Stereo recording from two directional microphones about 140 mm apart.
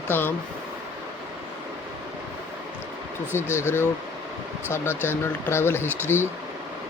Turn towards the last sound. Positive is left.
turn(degrees=15)  # may be behind; listen again after turning